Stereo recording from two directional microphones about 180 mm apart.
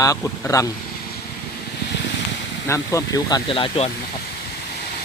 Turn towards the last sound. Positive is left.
turn(degrees=30)  # may be behind; listen again after turning